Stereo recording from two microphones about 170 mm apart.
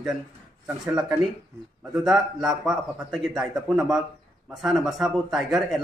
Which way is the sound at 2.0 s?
Centre (ahead or behind).